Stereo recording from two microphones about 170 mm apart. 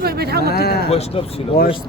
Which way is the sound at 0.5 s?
70° left (ahead or behind).